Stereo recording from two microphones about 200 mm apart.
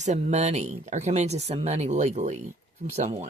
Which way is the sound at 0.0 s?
35° right (ahead or behind).